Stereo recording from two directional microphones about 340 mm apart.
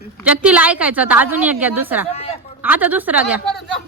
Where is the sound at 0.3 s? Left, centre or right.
Centre.